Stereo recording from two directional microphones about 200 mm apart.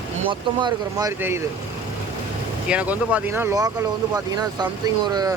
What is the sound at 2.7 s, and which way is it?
Speech, 5° right (ahead or behind).